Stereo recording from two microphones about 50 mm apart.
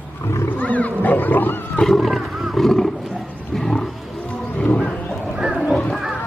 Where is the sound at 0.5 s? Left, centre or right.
Left.